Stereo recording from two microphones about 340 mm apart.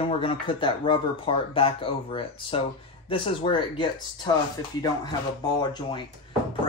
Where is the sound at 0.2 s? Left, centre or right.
Centre.